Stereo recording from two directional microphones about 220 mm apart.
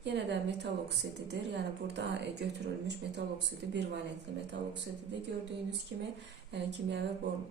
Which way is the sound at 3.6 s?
55° right (ahead or behind).